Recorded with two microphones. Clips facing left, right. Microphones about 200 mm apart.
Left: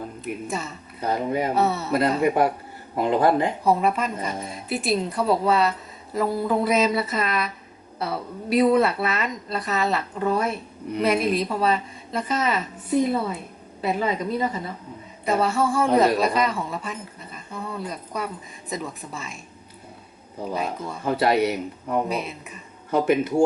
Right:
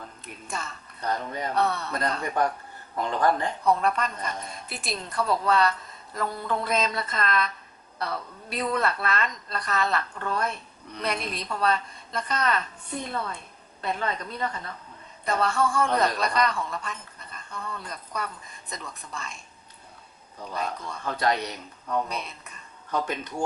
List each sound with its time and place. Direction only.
0.4 s speech: 5° left (ahead or behind)
20.5 s speech: 10° left (ahead or behind)